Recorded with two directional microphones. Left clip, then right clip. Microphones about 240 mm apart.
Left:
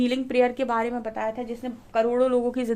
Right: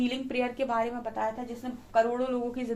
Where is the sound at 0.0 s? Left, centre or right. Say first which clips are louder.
Left 8 dB; left.